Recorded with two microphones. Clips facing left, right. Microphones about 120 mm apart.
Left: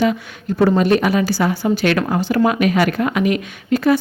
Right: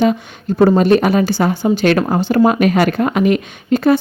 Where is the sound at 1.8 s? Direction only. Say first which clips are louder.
Right 5 dB; 35° right (ahead or behind).